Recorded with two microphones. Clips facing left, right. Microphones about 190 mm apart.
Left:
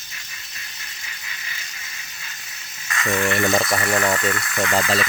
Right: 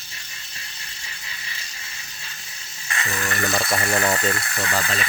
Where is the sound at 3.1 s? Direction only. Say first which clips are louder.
Left 6 dB; 35° left (ahead or behind).